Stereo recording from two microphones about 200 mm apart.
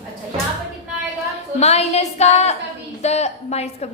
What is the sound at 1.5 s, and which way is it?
A woman's voice, 30° left (ahead or behind).